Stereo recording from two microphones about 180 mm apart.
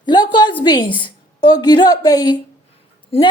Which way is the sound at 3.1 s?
30° left (ahead or behind).